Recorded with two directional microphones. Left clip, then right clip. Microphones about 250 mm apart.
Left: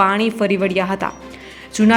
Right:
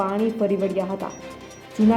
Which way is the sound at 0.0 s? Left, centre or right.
Centre.